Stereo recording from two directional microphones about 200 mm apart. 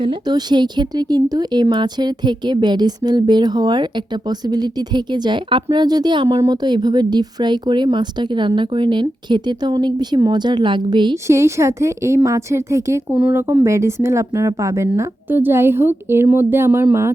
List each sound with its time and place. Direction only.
0.0 s speech: 20° right (ahead or behind)